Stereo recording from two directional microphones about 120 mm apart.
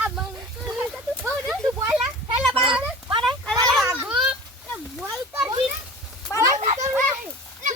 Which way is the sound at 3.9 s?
15° right (ahead or behind).